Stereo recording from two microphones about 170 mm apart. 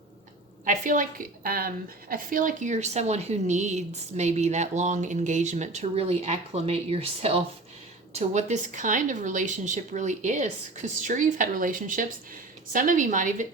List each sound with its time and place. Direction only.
0.6 s a woman's voice: 50° right (ahead or behind)